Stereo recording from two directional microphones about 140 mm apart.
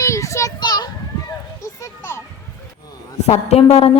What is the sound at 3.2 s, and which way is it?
Speech, 50° left (ahead or behind).